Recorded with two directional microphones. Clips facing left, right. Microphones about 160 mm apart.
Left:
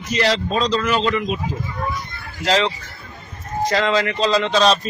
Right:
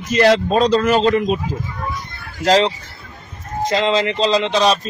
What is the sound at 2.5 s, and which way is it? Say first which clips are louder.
Speech: right 4 dB; 35° right (ahead or behind).